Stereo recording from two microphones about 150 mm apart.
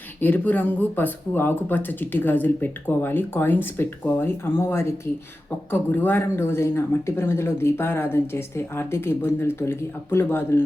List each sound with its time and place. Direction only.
0.2 s speech: 10° left (ahead or behind)